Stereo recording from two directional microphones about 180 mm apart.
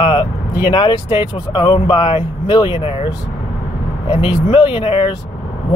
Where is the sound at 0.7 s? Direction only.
25° left (ahead or behind).